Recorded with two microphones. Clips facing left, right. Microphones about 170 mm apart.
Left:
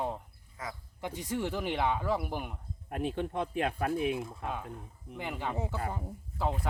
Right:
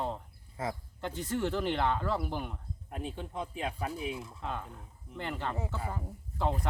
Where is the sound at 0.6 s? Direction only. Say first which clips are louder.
Right 6 dB; 30° right (ahead or behind).